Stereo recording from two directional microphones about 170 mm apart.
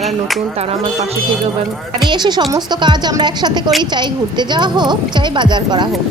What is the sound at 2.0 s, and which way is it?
Speech, 25° right (ahead or behind).